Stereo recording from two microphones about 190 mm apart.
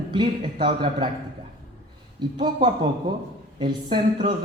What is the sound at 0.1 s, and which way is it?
Speech, 25° right (ahead or behind).